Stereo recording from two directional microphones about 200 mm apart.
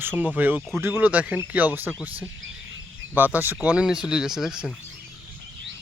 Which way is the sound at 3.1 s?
10° right (ahead or behind).